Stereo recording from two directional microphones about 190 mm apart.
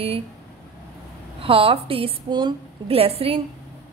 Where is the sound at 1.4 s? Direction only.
30° right (ahead or behind).